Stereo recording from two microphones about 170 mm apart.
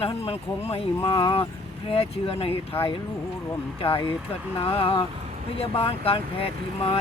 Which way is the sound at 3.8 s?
35° left (ahead or behind).